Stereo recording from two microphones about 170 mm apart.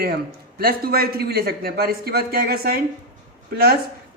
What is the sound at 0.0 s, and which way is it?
A man's voice, 65° right (ahead or behind).